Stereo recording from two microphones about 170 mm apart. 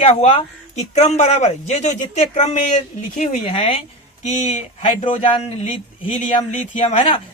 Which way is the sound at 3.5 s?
30° left (ahead or behind).